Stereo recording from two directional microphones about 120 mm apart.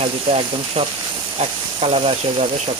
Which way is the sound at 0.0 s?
50° right (ahead or behind).